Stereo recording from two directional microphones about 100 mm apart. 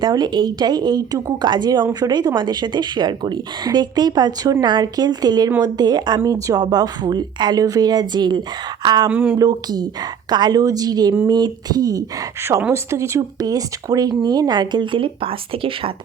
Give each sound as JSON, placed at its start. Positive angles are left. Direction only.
{"t": 0.0, "sound": "a woman's voice", "side_deg": -45}
{"t": 9.0, "sound": "speech", "side_deg": -15}
{"t": 9.4, "sound": "a woman's voice", "side_deg": -40}